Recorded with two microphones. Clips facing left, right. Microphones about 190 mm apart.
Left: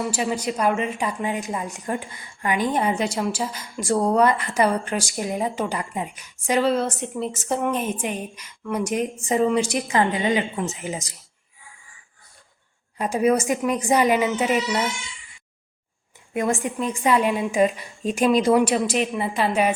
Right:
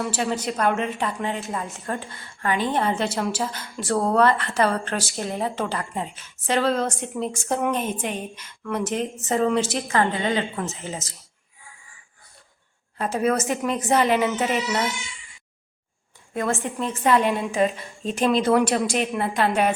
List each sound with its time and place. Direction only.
0.0 s a woman's voice: 5° left (ahead or behind)
13.0 s a woman's voice: 15° left (ahead or behind)
16.3 s a woman's voice: 15° left (ahead or behind)